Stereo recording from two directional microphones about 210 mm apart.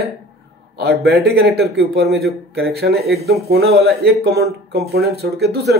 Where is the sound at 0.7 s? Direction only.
50° right (ahead or behind).